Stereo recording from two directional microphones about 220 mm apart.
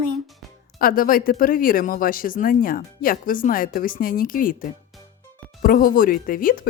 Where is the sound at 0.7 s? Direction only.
40° left (ahead or behind).